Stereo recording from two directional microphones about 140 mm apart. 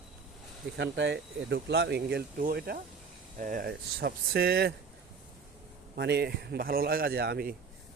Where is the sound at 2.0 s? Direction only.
90° right.